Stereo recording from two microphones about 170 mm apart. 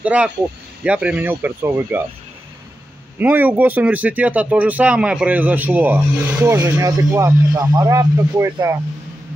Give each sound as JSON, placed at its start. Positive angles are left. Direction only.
{"t": 0.0, "sound": "speech", "side_deg": -5}
{"t": 3.2, "sound": "speech", "side_deg": -10}